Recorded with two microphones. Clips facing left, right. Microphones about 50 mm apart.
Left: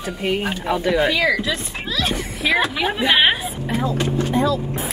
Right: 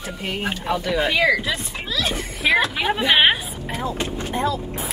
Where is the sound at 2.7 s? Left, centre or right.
Centre.